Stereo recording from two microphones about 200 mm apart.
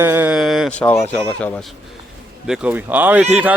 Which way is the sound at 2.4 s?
5° right (ahead or behind).